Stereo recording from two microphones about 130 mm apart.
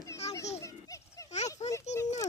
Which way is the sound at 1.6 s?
25° left (ahead or behind).